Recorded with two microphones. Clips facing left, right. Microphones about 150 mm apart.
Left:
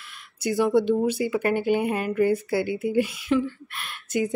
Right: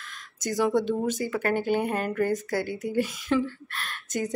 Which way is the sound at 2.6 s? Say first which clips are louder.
Left 4 dB; 40° right (ahead or behind).